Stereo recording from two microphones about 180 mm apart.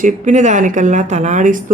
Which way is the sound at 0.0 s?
40° right (ahead or behind).